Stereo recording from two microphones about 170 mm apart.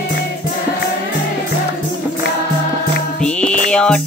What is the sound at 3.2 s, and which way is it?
Music, 5° left (ahead or behind).